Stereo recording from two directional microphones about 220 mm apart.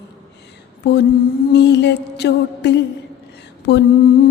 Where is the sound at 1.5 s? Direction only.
50° left (ahead or behind).